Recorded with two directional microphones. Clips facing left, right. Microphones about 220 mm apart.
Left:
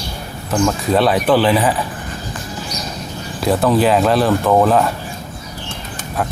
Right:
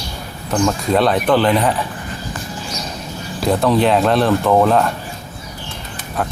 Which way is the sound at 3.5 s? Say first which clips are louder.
Left 1 dB; 5° left (ahead or behind).